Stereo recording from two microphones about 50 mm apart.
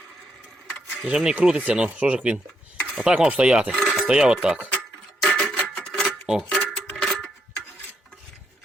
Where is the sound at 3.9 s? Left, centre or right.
Centre.